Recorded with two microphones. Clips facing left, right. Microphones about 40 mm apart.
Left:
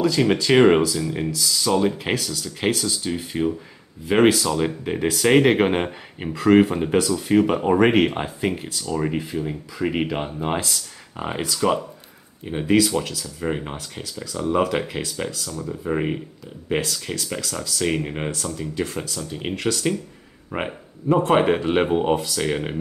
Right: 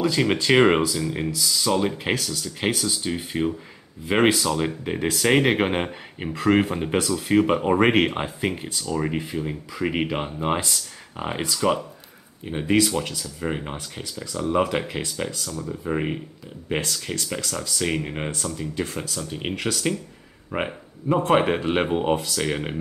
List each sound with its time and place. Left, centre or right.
0.0 s speech: centre